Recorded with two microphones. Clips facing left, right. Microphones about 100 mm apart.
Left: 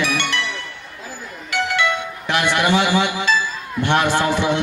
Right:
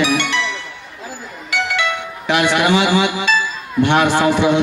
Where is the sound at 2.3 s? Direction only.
55° right (ahead or behind).